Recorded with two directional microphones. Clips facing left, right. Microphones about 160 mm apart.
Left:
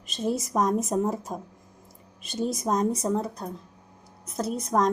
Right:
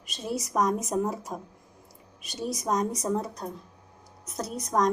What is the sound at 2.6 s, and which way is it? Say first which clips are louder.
Speech: left 2 dB; 25° left (ahead or behind).